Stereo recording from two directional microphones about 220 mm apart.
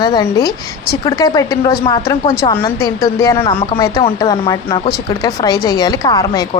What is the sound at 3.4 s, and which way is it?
A woman's voice, 25° left (ahead or behind).